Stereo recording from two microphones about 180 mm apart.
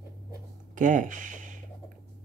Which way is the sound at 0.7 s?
45° right (ahead or behind).